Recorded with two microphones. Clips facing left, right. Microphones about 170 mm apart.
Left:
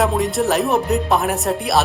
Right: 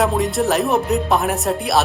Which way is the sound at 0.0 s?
Centre (ahead or behind).